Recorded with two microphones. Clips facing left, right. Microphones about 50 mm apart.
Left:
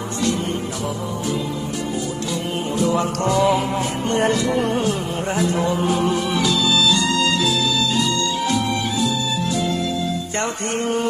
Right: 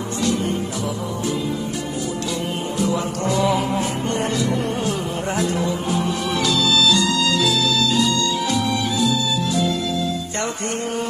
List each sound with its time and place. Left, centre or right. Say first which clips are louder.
3.3 s music: left 1 dB; centre
4.2 s music: left 5 dB; left
4.8 s music: left 1 dB; left
5.5 s music: left 3 dB; left
6.3 s music: even; centre
7.1 s music: left 1 dB; left
10.3 s music: left 2 dB; left